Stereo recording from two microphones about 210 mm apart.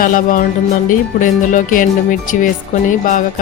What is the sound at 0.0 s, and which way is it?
A woman's voice, 40° left (ahead or behind).